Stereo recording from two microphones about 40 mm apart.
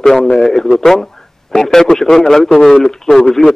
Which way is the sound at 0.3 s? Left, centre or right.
Centre.